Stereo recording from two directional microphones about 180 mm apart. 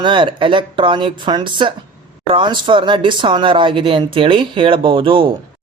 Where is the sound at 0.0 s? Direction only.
25° right (ahead or behind).